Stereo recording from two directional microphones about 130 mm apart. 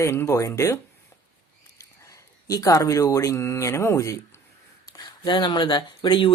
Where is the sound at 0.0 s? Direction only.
20° left (ahead or behind).